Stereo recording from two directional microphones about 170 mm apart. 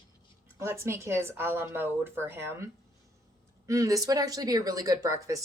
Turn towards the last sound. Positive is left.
turn(degrees=-20)  # may be behind; listen again after turning